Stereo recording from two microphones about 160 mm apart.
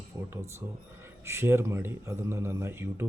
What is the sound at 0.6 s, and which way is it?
A man's voice, 15° right (ahead or behind).